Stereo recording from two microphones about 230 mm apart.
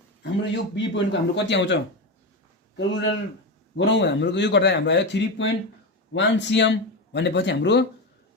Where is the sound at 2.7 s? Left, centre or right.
Left.